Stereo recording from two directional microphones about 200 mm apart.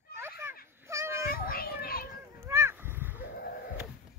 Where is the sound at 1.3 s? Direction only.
45° left (ahead or behind).